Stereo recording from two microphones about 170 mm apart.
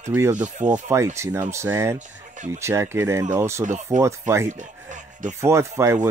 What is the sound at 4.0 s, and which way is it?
Speech, 15° right (ahead or behind).